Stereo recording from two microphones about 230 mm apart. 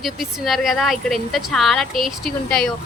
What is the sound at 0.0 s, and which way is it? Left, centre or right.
Speech, centre.